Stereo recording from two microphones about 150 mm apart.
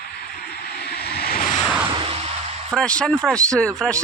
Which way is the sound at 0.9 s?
90° left.